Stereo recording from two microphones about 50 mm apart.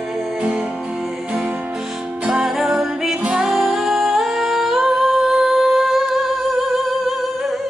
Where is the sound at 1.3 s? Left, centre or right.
Right.